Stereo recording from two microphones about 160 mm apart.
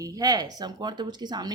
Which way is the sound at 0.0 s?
20° right (ahead or behind).